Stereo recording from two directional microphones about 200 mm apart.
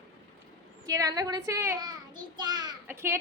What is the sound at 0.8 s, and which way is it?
A child's voice, 15° right (ahead or behind).